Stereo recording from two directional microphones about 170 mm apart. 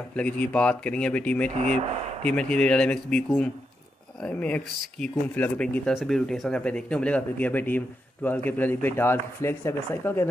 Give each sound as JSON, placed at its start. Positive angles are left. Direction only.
{"t": 0.1, "sound": "speech", "side_deg": 10}
{"t": 1.5, "sound": "speech", "side_deg": -40}
{"t": 2.5, "sound": "speech", "side_deg": 5}